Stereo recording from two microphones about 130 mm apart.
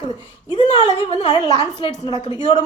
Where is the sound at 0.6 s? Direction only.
55° left (ahead or behind).